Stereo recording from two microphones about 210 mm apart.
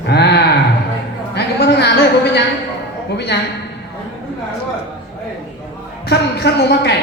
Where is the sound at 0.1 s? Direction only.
50° left (ahead or behind).